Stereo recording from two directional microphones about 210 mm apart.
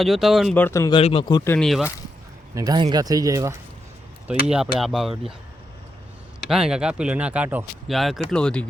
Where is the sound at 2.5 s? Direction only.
20° right (ahead or behind).